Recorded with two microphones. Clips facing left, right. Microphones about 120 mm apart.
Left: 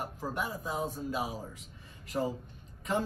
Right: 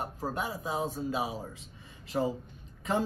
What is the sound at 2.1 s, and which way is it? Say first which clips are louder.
Speech: right 2 dB; 50° right (ahead or behind).